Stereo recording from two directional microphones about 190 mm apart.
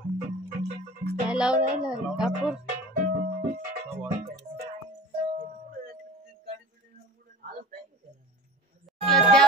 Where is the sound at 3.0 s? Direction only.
50° right (ahead or behind).